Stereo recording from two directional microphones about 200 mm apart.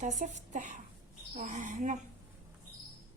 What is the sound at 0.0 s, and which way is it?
A woman's voice, 40° right (ahead or behind).